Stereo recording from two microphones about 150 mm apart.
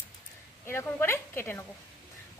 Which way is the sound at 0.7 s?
15° left (ahead or behind).